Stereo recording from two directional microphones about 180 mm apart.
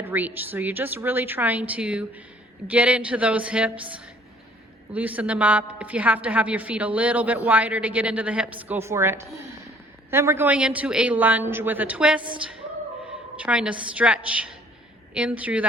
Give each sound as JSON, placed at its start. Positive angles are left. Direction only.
{"t": 0.0, "sound": "a woman's voice", "side_deg": -10}
{"t": 13.4, "sound": "a woman's voice", "side_deg": -5}